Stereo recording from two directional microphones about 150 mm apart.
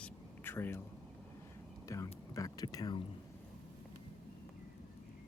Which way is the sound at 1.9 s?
20° left (ahead or behind).